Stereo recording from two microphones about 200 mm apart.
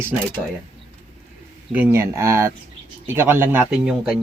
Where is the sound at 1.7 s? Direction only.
10° right (ahead or behind).